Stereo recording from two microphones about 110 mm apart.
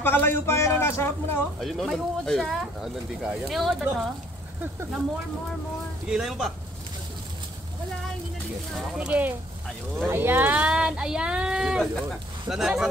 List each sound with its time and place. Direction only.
0.0 s a man's voice: 20° left (ahead or behind)
1.6 s speech: centre (ahead or behind)
6.0 s speech: 5° right (ahead or behind)
8.7 s speech: 10° right (ahead or behind)